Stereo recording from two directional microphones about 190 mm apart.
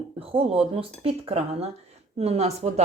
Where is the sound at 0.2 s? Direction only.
30° right (ahead or behind).